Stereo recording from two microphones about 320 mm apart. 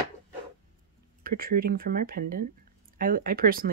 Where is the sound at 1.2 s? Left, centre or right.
Right.